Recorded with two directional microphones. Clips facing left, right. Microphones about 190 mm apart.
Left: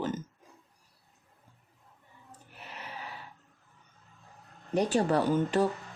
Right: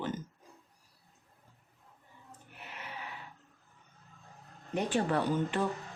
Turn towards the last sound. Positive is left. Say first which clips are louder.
# left 5 dB
turn(degrees=40)  # may be behind; listen again after turning